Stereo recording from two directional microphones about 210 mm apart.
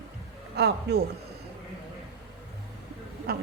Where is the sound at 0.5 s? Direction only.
50° right (ahead or behind).